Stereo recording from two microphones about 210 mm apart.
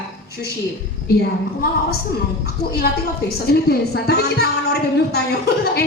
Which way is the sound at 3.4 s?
50° left (ahead or behind).